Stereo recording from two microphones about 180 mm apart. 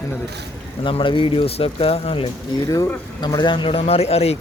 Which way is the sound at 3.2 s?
25° left (ahead or behind).